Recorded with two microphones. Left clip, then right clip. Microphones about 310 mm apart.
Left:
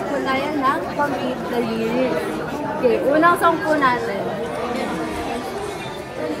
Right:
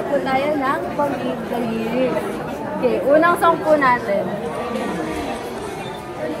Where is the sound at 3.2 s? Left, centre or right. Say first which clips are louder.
Right 1 dB; centre.